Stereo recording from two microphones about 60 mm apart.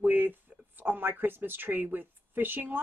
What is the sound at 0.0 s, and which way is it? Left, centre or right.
A woman's voice, right.